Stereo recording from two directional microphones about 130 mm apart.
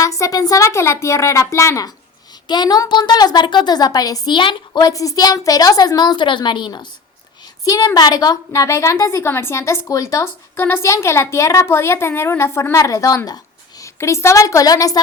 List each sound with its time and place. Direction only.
0.0 s a woman's voice: 25° left (ahead or behind)